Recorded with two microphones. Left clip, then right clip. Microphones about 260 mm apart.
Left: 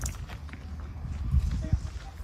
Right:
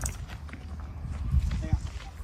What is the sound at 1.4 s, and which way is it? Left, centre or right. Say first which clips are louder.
Clip-clop: right 1 dB; right.